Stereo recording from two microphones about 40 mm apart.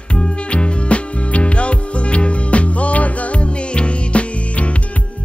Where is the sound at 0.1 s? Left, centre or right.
Left.